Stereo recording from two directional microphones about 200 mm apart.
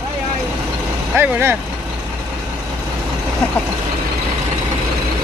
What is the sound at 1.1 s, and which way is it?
Speech, 10° right (ahead or behind).